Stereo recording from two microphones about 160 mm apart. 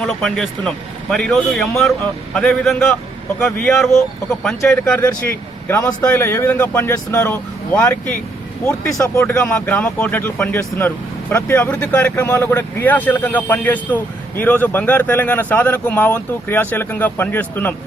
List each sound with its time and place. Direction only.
0.0 s a man's voice: 5° left (ahead or behind)
4.9 s speech: 15° left (ahead or behind)